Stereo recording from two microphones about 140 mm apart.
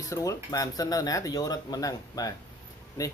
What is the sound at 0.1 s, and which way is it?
Speech, 25° left (ahead or behind).